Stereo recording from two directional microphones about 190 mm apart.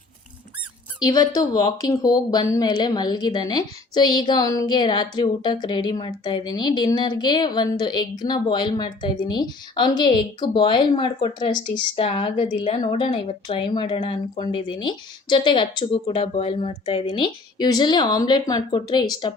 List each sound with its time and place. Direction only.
1.0 s a woman's voice: 20° left (ahead or behind)